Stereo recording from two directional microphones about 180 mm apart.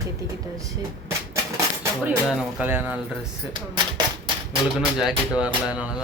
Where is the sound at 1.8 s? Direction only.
5° right (ahead or behind).